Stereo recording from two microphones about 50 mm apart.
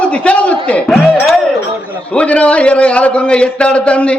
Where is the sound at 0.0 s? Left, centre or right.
Left.